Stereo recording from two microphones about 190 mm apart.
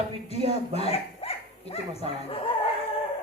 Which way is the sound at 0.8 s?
30° left (ahead or behind).